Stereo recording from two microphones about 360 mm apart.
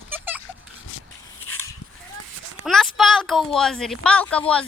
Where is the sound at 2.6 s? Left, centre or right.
Centre.